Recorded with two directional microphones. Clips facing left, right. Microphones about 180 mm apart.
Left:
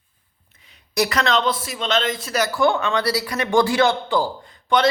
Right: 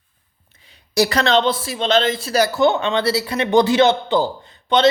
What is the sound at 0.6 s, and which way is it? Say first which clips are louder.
A woman's voice: right 4 dB; 30° right (ahead or behind).